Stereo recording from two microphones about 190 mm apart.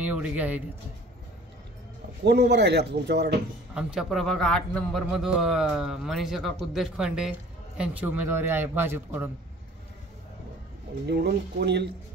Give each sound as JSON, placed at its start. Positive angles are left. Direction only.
{"t": 0.0, "sound": "a man's voice", "side_deg": -10}
{"t": 2.2, "sound": "speech", "side_deg": -60}
{"t": 3.7, "sound": "a man's voice", "side_deg": -5}
{"t": 11.1, "sound": "speech", "side_deg": -60}